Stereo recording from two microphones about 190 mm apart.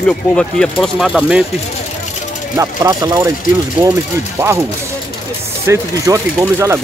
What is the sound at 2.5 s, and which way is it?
Speech, 15° right (ahead or behind).